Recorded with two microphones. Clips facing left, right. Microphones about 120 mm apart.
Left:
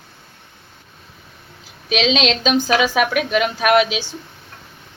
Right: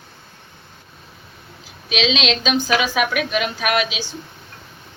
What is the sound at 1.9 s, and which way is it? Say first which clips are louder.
A woman's voice: left 3 dB; 45° left (ahead or behind).